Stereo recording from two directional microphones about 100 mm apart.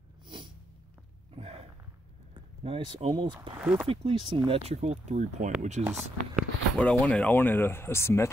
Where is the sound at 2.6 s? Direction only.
75° right (ahead or behind).